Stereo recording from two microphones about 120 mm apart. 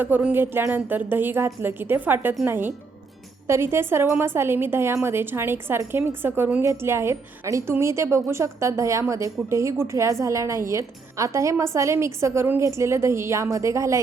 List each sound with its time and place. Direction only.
0.0 s a woman's voice: 15° right (ahead or behind)